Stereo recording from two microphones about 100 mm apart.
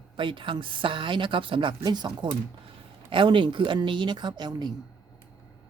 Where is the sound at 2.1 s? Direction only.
60° right (ahead or behind).